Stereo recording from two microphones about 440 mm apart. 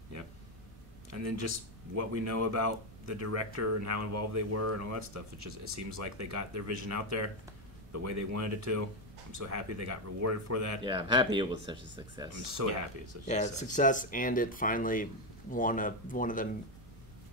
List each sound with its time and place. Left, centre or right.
1.1 s speech: right
10.8 s speech: centre
12.6 s speech: right
13.3 s speech: centre